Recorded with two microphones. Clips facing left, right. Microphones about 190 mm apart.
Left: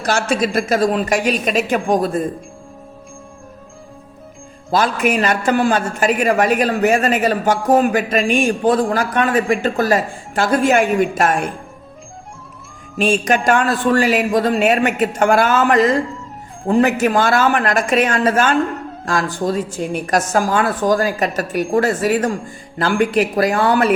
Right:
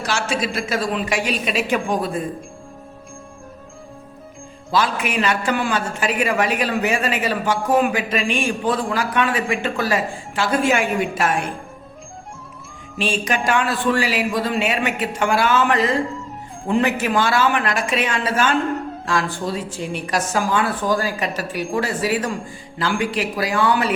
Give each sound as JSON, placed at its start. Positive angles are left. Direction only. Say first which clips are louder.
{"t": 0.0, "sound": "a woman's voice", "louder": "left 5 dB", "side_deg": 45}
{"t": 4.7, "sound": "a woman's voice", "louder": "left 4 dB", "side_deg": 45}
{"t": 13.0, "sound": "a woman's voice", "louder": "left 6 dB", "side_deg": 45}